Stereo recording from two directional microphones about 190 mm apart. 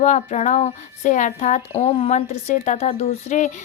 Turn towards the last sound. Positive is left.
turn(degrees=40)  # may be behind; listen again after turning